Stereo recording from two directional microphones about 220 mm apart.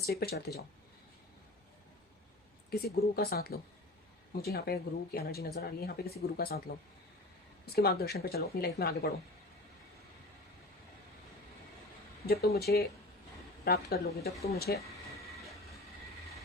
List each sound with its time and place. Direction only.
0.0 s speech: 45° left (ahead or behind)
2.6 s speech: 45° left (ahead or behind)
7.6 s speech: 45° left (ahead or behind)
12.2 s speech: 45° left (ahead or behind)